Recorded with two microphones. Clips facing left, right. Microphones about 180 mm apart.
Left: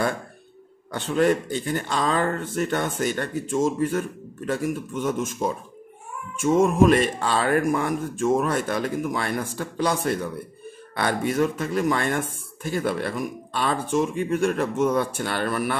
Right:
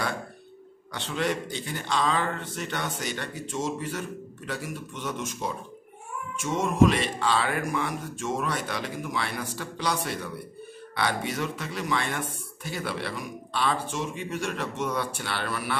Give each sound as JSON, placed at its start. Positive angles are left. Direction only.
{"t": 0.9, "sound": "speech", "side_deg": 45}